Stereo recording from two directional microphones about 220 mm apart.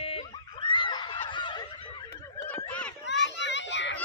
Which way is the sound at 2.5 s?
5° left (ahead or behind).